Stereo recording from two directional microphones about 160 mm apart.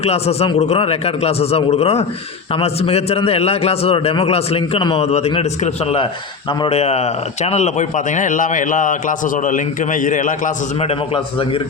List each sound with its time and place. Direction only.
0.0 s a man's voice: 40° left (ahead or behind)